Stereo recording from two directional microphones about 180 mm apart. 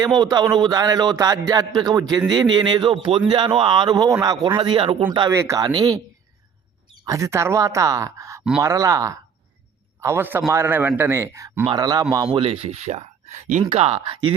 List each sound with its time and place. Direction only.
0.2 s speech: 20° right (ahead or behind)
5.3 s speech: 15° right (ahead or behind)
7.0 s speech: 15° right (ahead or behind)